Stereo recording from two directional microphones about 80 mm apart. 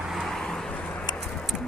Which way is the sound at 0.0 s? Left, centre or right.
Centre.